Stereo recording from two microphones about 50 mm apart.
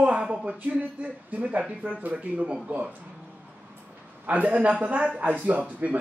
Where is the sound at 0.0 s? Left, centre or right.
Right.